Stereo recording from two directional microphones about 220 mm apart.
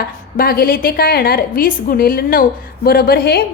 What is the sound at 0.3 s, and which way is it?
A woman's voice, 45° left (ahead or behind).